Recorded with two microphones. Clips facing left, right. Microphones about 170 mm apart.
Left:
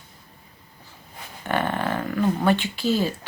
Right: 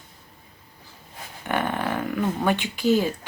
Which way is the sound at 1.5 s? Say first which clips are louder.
Left 1 dB; 15° right (ahead or behind).